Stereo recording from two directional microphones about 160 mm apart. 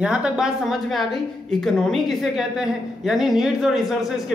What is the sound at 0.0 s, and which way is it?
A woman's voice, 5° right (ahead or behind).